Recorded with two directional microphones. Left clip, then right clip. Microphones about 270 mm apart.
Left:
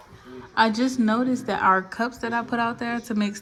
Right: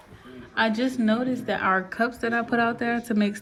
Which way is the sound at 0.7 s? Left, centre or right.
Centre.